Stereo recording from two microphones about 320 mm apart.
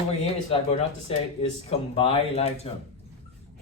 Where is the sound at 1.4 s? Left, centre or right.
Centre.